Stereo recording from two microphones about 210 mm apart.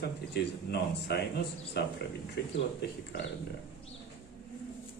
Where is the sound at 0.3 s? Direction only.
50° left (ahead or behind).